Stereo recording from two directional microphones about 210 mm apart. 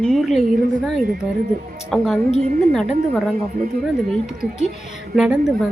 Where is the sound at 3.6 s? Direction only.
40° right (ahead or behind).